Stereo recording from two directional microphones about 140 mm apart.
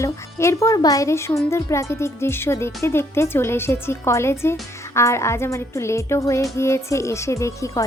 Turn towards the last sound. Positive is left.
turn(degrees=20)  # may be behind; listen again after turning